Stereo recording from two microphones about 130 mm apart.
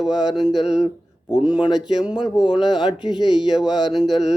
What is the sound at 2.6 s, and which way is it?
Speech, 35° left (ahead or behind).